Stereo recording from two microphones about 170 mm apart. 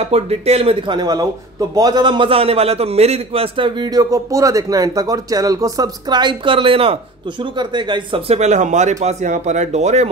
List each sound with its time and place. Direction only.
0.1 s a man's voice: 35° right (ahead or behind)